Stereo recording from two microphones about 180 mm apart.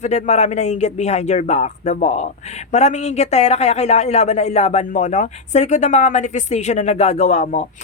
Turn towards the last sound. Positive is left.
turn(degrees=40)  # may be behind; listen again after turning